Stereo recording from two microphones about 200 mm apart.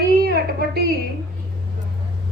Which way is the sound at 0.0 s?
50° right (ahead or behind).